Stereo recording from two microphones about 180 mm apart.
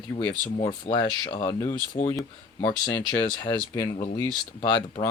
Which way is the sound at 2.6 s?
25° left (ahead or behind).